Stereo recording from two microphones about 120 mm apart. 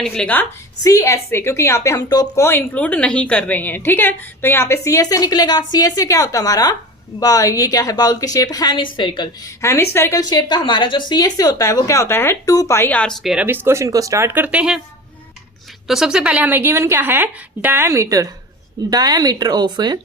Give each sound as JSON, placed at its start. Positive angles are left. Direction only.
{"t": 0.0, "sound": "a woman's voice", "side_deg": 5}
{"t": 0.8, "sound": "a woman's voice", "side_deg": 30}
{"t": 9.6, "sound": "a woman's voice", "side_deg": 20}
{"t": 10.2, "sound": "a woman's voice", "side_deg": 35}
{"t": 13.2, "sound": "a woman's voice", "side_deg": -5}
{"t": 13.5, "sound": "speech", "side_deg": -20}
{"t": 15.9, "sound": "a woman's voice", "side_deg": -5}